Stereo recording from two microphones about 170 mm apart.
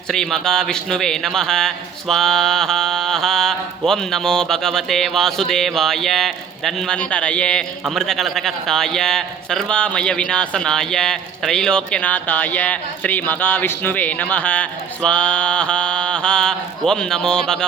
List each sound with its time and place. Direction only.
0.1 s a man's voice: centre (ahead or behind)